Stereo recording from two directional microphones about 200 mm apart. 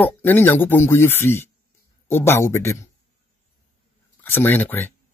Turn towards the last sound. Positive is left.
turn(degrees=10)  # may be behind; listen again after turning